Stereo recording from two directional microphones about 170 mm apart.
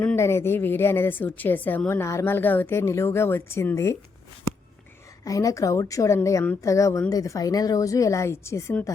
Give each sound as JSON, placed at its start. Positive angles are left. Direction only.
{"t": 0.0, "sound": "a woman's voice", "side_deg": 10}
{"t": 5.2, "sound": "a woman's voice", "side_deg": 20}